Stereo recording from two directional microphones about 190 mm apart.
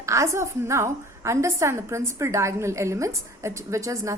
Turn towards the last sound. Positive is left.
turn(degrees=-15)  # may be behind; listen again after turning